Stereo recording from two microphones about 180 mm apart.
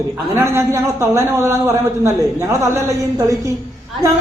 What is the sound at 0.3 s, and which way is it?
A man's voice, 15° right (ahead or behind).